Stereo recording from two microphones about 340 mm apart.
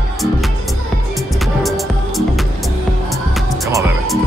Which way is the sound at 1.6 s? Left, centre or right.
Centre.